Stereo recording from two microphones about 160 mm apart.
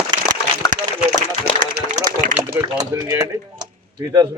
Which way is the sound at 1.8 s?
75° right (ahead or behind).